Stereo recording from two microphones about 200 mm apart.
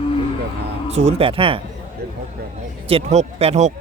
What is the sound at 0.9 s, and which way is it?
Speech, 30° right (ahead or behind).